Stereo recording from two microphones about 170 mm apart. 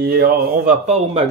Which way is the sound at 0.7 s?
40° right (ahead or behind).